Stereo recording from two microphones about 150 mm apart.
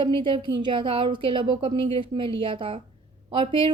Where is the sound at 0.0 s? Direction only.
35° right (ahead or behind).